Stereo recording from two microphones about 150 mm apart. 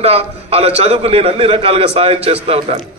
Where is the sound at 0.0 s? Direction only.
40° right (ahead or behind).